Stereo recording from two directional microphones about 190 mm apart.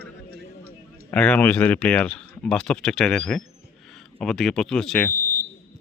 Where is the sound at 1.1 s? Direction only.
5° left (ahead or behind).